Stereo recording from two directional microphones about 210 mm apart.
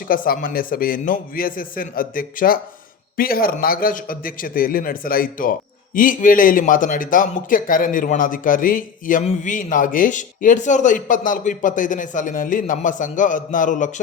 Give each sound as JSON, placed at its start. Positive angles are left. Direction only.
{"t": 0.1, "sound": "a man's voice", "side_deg": 40}